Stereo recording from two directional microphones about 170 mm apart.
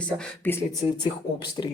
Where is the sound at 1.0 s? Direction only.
25° left (ahead or behind).